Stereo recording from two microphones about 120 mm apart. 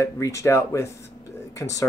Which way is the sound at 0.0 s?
25° left (ahead or behind).